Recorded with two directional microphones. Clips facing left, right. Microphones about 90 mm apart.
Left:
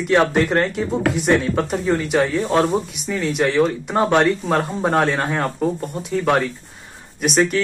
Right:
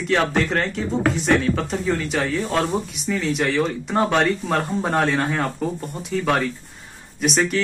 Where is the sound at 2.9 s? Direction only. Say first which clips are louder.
Even; 5° left (ahead or behind).